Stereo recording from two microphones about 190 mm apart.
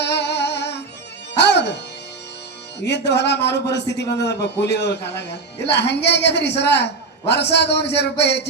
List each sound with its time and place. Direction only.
0.0 s music: 65° left (ahead or behind)
2.8 s a woman's voice: 65° left (ahead or behind)